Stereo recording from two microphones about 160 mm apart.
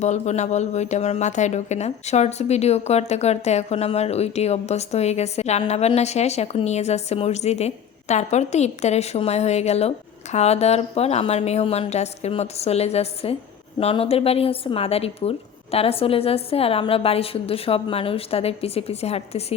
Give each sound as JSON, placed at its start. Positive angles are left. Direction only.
{"t": 0.0, "sound": "a woman's voice", "side_deg": 45}